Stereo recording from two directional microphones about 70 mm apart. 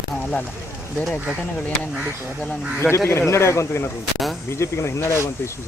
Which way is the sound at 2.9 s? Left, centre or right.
Left.